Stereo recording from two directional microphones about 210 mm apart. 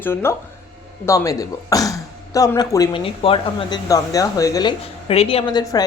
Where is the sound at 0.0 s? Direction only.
10° left (ahead or behind).